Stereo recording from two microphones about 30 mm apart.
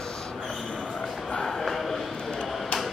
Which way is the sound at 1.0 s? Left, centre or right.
Left.